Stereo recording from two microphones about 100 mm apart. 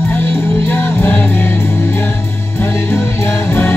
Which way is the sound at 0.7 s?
20° left (ahead or behind).